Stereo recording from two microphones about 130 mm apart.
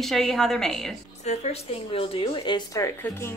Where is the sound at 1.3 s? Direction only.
55° left (ahead or behind); by 2.6 s 40° left (ahead or behind).